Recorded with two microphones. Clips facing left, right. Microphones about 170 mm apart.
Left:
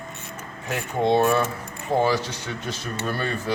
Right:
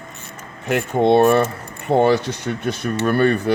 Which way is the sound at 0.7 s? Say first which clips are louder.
Right 6 dB; 65° right (ahead or behind).